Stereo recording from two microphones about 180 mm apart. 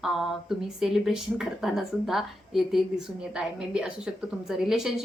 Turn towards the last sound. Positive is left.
turn(degrees=0)  # may be behind; listen again after turning